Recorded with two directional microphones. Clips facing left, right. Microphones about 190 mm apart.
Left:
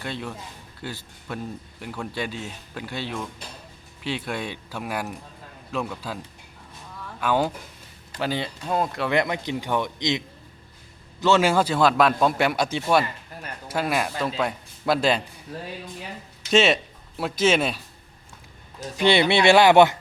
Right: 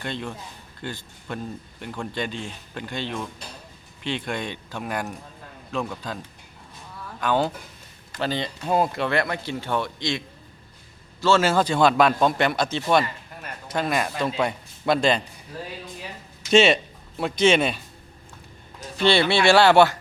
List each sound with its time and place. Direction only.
0.0 s a man's voice: 5° left (ahead or behind)
7.2 s a man's voice: 10° left (ahead or behind)
8.6 s speech: 5° right (ahead or behind)
9.0 s a man's voice: 20° left (ahead or behind)
16.5 s speech: centre (ahead or behind)
18.9 s speech: 15° left (ahead or behind)